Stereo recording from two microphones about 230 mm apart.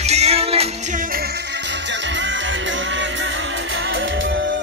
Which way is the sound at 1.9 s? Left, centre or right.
Right.